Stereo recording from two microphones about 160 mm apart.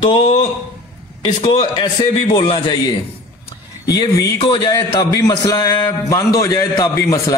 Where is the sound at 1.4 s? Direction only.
35° left (ahead or behind).